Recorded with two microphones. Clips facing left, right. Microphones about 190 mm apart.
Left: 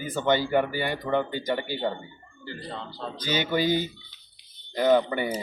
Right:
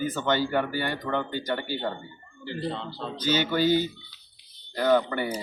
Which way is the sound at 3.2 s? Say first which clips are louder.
Right 2 dB; 15° left (ahead or behind).